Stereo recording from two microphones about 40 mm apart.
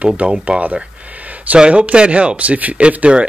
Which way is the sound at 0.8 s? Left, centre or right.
Right.